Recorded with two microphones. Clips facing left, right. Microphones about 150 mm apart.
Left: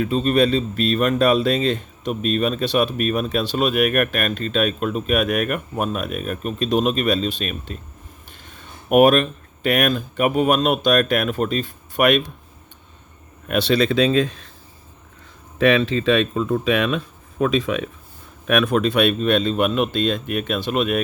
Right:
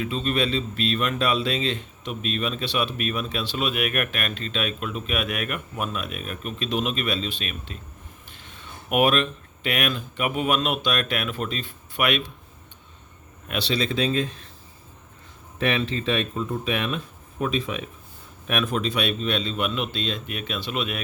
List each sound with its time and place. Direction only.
0.0 s speech: 45° left (ahead or behind)
13.5 s speech: 50° left (ahead or behind); by 14.5 s 85° left
15.5 s speech: 90° left
18.4 s speech: 70° left (ahead or behind); by 21.0 s 45° left (ahead or behind)